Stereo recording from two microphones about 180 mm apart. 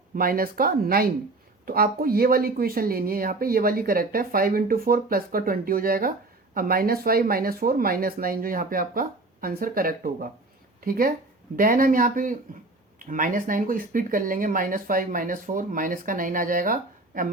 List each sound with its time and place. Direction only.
0.2 s speech: 55° right (ahead or behind)